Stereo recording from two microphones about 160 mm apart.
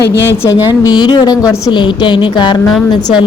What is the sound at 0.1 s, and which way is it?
Speech, 90° left.